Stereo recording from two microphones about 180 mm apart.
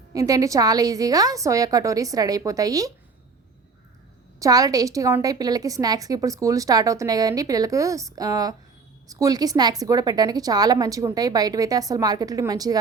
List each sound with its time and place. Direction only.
0.1 s a woman's voice: 20° right (ahead or behind)
4.4 s a woman's voice: 20° right (ahead or behind)